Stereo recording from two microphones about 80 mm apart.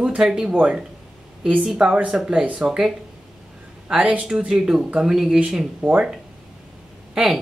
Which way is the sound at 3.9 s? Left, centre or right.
Centre.